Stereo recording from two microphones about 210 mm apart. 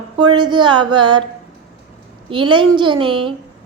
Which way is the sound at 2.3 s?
25° right (ahead or behind).